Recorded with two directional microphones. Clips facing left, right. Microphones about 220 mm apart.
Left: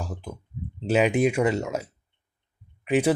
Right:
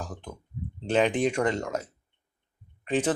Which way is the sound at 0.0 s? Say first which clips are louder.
Left 3 dB; 10° left (ahead or behind).